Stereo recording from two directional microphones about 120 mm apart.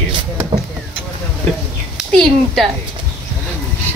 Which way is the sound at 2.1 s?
5° left (ahead or behind).